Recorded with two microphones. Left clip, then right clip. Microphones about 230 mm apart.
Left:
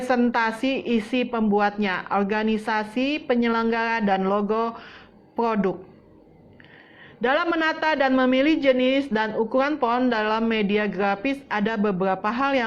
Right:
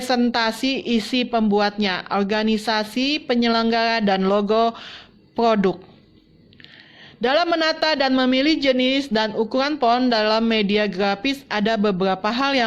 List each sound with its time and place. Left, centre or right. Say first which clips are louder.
0.0 s a woman's voice: right 1 dB; right
7.2 s a woman's voice: right 3 dB; right